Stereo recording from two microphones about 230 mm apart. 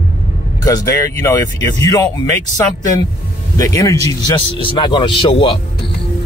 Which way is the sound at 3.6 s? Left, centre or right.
Centre.